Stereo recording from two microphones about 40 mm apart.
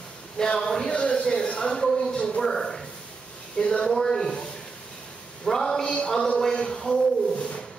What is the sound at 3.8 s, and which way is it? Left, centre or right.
Speech, centre.